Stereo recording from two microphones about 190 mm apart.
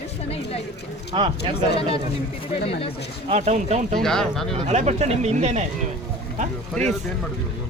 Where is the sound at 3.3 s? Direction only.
35° right (ahead or behind).